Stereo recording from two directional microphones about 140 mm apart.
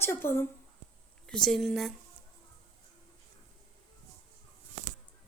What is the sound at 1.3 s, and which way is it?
Speech, 5° left (ahead or behind).